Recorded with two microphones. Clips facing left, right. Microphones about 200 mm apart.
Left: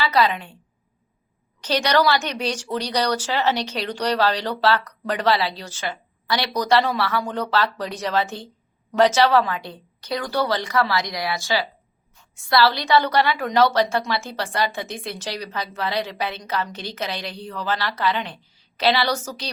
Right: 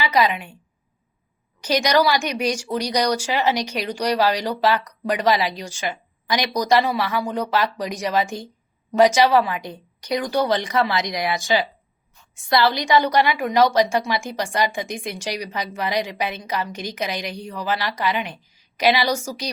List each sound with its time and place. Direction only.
0.0 s a woman's voice: 15° right (ahead or behind)
1.6 s a woman's voice: 10° right (ahead or behind)